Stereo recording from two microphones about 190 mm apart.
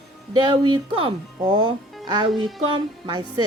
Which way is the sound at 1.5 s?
25° right (ahead or behind).